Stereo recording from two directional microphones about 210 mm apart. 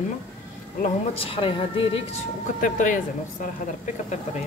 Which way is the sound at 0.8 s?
25° left (ahead or behind).